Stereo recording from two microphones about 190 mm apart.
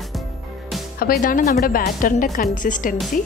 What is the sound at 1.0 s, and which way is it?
A woman's voice, 50° left (ahead or behind).